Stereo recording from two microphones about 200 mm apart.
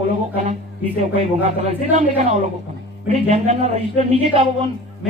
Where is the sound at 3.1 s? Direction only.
35° right (ahead or behind).